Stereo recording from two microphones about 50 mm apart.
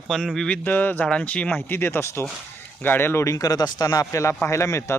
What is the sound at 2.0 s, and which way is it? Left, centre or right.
Speech, left.